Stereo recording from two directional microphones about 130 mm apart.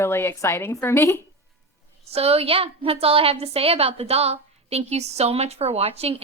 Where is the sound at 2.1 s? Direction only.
50° right (ahead or behind).